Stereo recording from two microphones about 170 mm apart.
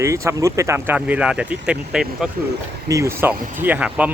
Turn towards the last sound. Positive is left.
turn(degrees=-10)  # may be behind; listen again after turning